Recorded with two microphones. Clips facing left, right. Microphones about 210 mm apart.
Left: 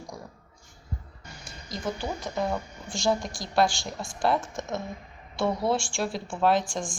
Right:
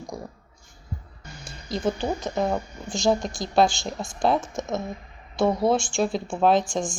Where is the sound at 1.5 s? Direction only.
30° right (ahead or behind).